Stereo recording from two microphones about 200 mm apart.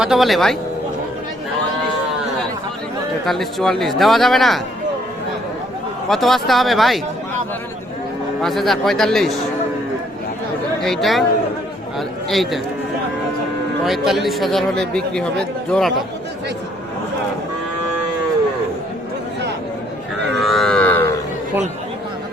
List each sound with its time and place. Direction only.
0.0 s speech: centre (ahead or behind)
3.2 s speech: centre (ahead or behind)
6.1 s speech: centre (ahead or behind)
8.4 s speech: centre (ahead or behind)
10.8 s a man's voice: centre (ahead or behind)
13.8 s speech: centre (ahead or behind)
20.1 s a sound: 60° right (ahead or behind)
20.4 s cattle: centre (ahead or behind)